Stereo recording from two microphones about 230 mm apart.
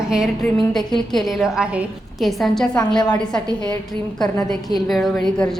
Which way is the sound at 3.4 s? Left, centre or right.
Centre.